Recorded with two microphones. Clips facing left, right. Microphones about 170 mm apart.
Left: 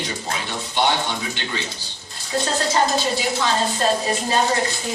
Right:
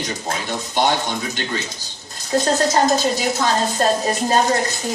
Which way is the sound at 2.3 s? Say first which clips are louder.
Right 5 dB; 40° right (ahead or behind).